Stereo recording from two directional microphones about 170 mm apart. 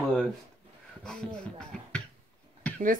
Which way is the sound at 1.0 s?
5° left (ahead or behind).